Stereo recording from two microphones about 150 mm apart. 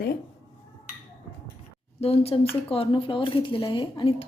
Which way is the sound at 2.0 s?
40° left (ahead or behind).